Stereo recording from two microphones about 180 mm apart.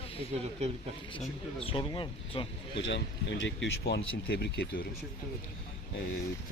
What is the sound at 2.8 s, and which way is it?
Speech, 85° left.